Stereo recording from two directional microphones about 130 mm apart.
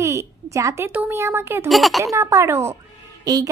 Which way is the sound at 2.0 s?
20° right (ahead or behind).